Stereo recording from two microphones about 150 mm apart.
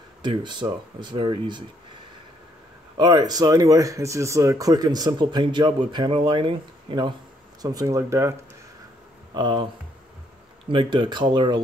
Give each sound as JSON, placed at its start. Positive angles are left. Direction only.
{"t": 0.2, "sound": "speech", "side_deg": -30}
{"t": 3.0, "sound": "speech", "side_deg": -30}
{"t": 9.3, "sound": "speech", "side_deg": -30}
{"t": 10.7, "sound": "speech", "side_deg": -35}